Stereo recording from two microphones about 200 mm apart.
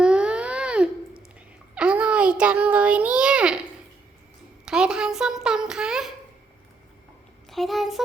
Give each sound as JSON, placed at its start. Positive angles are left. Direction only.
{"t": 0.0, "sound": "a sound", "side_deg": -5}
{"t": 4.6, "sound": "a child's voice", "side_deg": -5}
{"t": 7.5, "sound": "speech", "side_deg": 0}